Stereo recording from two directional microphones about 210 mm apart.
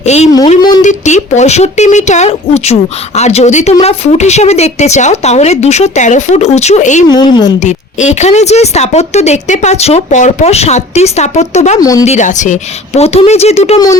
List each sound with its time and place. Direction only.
0.0 s speech: 30° left (ahead or behind)
0.8 s speech: 35° left (ahead or behind)
7.1 s a woman's voice: 20° left (ahead or behind)
7.6 s speech: 35° left (ahead or behind)
11.8 s speech: 15° left (ahead or behind)
12.0 s speech: 35° left (ahead or behind)